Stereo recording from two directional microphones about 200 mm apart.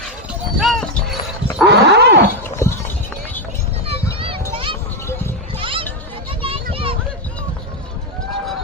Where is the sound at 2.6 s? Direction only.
15° left (ahead or behind).